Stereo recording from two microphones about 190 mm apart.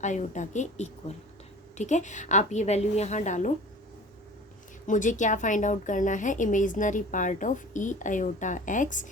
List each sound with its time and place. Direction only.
0.0 s a woman's voice: 40° left (ahead or behind)
4.9 s a woman's voice: 40° left (ahead or behind)